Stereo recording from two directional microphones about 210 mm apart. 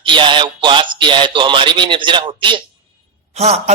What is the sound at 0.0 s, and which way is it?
A man's voice, 20° right (ahead or behind).